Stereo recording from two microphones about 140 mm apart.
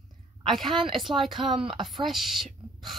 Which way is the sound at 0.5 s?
Centre (ahead or behind).